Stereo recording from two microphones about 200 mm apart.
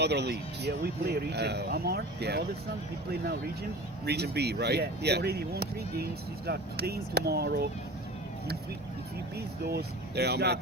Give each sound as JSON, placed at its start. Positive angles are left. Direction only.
{"t": 0.0, "sound": "speech", "side_deg": -55}
{"t": 4.0, "sound": "speech", "side_deg": -55}
{"t": 9.6, "sound": "speech", "side_deg": -55}